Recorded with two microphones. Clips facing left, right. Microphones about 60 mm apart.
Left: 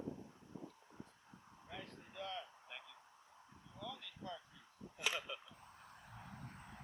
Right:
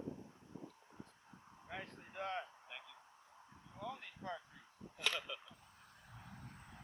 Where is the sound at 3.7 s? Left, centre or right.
Right.